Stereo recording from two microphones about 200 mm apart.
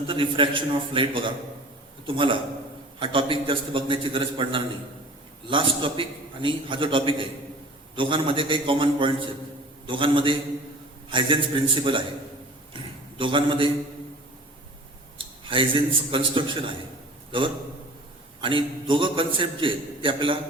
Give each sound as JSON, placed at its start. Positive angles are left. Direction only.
{"t": 0.1, "sound": "a man's voice", "side_deg": -25}
{"t": 15.4, "sound": "a man's voice", "side_deg": -25}
{"t": 18.3, "sound": "a man's voice", "side_deg": -25}